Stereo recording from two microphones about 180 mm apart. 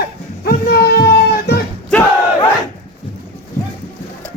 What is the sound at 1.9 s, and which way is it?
Battle cry, 5° left (ahead or behind).